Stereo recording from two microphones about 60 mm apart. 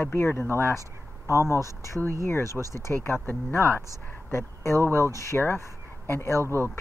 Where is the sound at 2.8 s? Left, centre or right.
Left.